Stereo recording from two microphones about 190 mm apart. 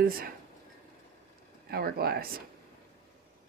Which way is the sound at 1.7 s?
55° right (ahead or behind).